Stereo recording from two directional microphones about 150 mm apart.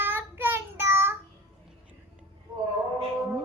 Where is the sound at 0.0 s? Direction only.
15° right (ahead or behind).